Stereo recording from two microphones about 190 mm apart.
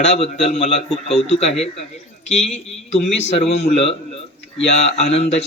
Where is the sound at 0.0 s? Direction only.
35° left (ahead or behind).